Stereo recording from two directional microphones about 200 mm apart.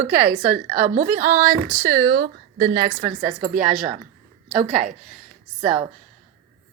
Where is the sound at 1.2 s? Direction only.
40° right (ahead or behind).